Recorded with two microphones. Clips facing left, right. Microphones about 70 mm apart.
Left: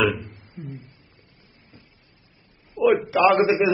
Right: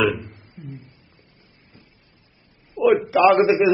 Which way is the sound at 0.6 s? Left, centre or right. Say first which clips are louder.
Left 2 dB; left.